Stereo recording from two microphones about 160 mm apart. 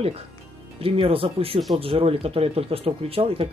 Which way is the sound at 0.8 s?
35° right (ahead or behind).